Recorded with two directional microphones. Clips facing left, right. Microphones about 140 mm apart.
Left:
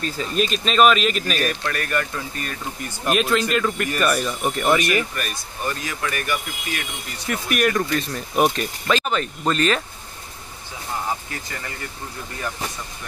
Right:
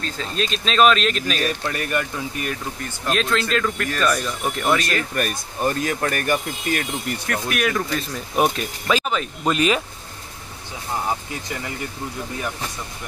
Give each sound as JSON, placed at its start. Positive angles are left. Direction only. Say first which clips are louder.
{"t": 0.0, "sound": "speech", "louder": "left 3 dB", "side_deg": 10}
{"t": 1.6, "sound": "speech", "louder": "even", "side_deg": -20}
{"t": 3.1, "sound": "speech", "louder": "left 2 dB", "side_deg": 5}
{"t": 5.1, "sound": "speech", "louder": "right 5 dB", "side_deg": -45}
{"t": 7.2, "sound": "speech", "louder": "left 3 dB", "side_deg": 0}